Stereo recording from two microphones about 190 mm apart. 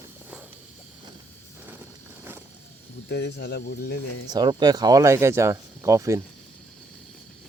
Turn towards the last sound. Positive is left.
turn(degrees=-15)  # may be behind; listen again after turning